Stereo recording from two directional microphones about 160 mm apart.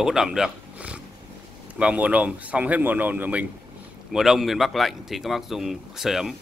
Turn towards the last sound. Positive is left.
turn(degrees=0)  # may be behind; listen again after turning